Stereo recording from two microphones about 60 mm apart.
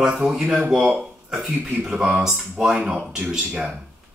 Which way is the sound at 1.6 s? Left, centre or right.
Centre.